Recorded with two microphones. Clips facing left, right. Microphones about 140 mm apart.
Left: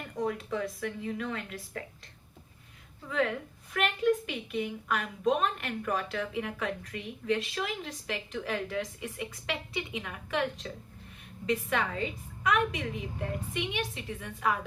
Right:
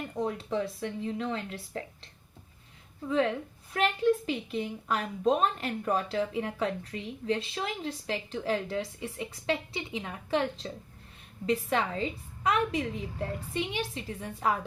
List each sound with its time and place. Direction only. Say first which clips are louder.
0.2 s a woman's voice: right 1 dB; 30° right (ahead or behind)
3.1 s a woman's voice: right 3 dB; 30° right (ahead or behind)